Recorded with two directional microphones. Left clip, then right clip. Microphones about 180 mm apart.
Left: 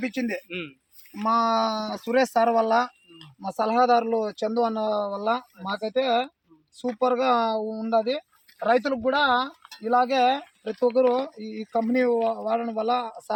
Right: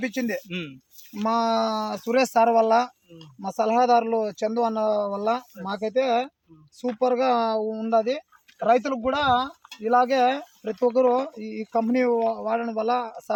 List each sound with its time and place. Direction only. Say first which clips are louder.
0.0 s speech: right 1 dB; 30° right (ahead or behind)
0.4 s speech: even; 65° right (ahead or behind)
1.2 s speech: left 1 dB; 30° right (ahead or behind); by 13.3 s 10° left (ahead or behind)